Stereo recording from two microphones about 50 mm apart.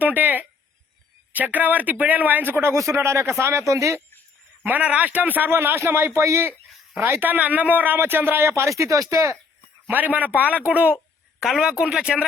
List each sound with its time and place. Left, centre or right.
0.0 s speech: right
2.7 s speech: right
4.6 s speech: right
6.1 s speech: right
7.2 s speech: right
9.8 s speech: right
11.6 s speech: centre